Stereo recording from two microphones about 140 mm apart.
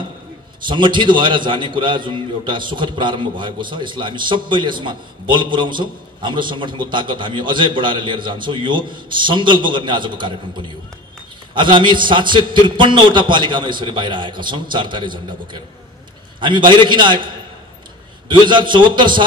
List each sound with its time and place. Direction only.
0.7 s a man's voice: 35° right (ahead or behind)
18.5 s a man's voice: 35° right (ahead or behind)